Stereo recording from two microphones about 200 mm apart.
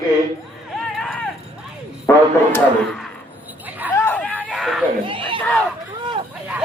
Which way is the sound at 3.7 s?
10° right (ahead or behind).